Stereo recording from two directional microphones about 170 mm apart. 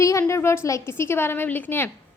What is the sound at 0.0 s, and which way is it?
A woman's voice, 15° left (ahead or behind).